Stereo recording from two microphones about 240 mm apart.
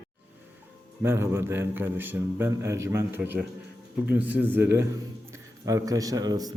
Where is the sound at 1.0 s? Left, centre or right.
Centre.